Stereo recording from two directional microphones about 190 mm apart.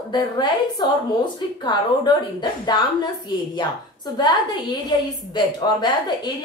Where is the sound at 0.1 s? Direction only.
20° left (ahead or behind).